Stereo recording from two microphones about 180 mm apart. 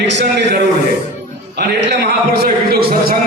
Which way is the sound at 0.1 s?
70° right (ahead or behind).